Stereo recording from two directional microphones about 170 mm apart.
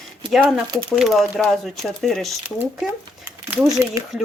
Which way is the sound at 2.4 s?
10° right (ahead or behind).